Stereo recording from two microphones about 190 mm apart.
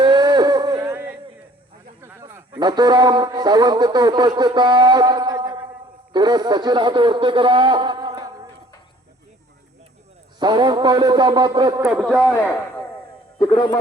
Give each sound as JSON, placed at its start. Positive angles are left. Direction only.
{"t": 0.0, "sound": "a sound", "side_deg": -20}
{"t": 2.0, "sound": "a man's voice", "side_deg": -15}
{"t": 10.4, "sound": "a man's voice", "side_deg": -20}
{"t": 11.9, "sound": "a man's voice", "side_deg": 0}
{"t": 13.4, "sound": "speech", "side_deg": 25}